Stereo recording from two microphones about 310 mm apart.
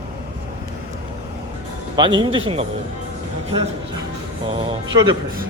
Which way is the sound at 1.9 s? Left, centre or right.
Centre.